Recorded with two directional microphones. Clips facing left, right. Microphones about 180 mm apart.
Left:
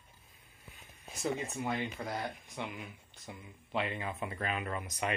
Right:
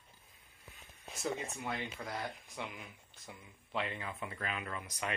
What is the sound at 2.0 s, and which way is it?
Speech, 35° left (ahead or behind).